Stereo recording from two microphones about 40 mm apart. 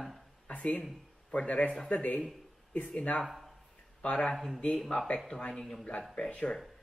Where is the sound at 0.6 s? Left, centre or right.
Left.